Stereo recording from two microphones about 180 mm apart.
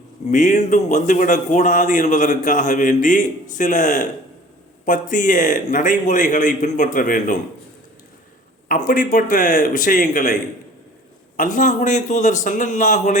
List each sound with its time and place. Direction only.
0.3 s speech: 45° left (ahead or behind)
8.7 s speech: 45° left (ahead or behind)
11.3 s speech: 45° left (ahead or behind)